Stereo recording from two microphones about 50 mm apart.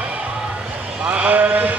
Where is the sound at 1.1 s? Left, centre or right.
Right.